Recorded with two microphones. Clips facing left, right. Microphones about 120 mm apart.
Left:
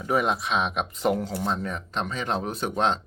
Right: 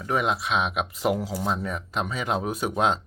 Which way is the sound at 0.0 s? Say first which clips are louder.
Left 1 dB; centre (ahead or behind).